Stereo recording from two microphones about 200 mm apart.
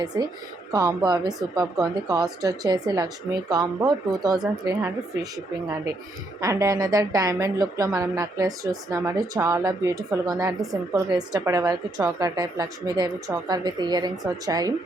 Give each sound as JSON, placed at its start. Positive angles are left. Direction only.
{"t": 0.1, "sound": "a woman's voice", "side_deg": -20}
{"t": 6.4, "sound": "a woman's voice", "side_deg": -15}